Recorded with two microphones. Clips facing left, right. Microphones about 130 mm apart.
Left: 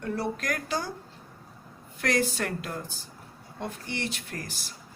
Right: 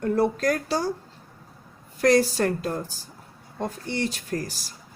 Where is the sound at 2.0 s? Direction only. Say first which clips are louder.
Right 8 dB; 35° right (ahead or behind).